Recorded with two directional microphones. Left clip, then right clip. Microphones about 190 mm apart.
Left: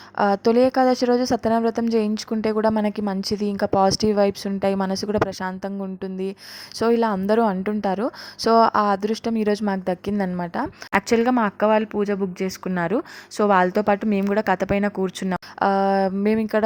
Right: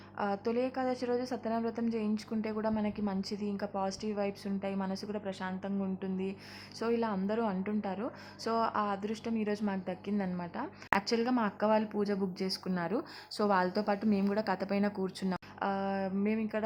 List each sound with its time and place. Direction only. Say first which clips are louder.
0.2 s a woman's voice: left 15 dB; 40° left (ahead or behind)